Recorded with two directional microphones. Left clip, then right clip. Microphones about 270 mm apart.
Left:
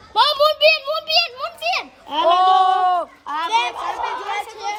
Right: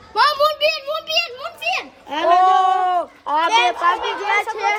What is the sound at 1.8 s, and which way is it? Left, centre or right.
Children playing, left.